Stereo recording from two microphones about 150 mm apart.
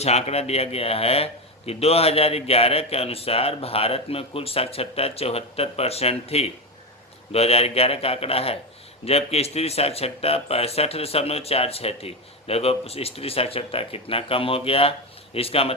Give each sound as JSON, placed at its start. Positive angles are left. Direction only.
{"t": 0.0, "sound": "a man's voice", "side_deg": 45}